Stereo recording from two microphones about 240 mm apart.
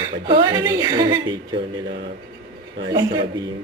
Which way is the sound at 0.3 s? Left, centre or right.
Centre.